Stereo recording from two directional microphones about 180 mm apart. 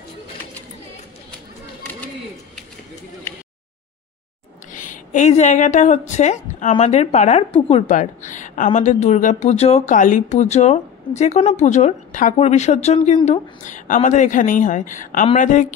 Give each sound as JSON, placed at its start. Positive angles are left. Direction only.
{"t": 4.7, "sound": "a woman's voice", "side_deg": 45}